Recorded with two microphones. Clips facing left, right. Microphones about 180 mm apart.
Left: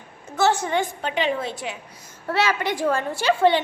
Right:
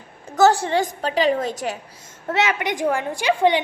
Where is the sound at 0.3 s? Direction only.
35° right (ahead or behind).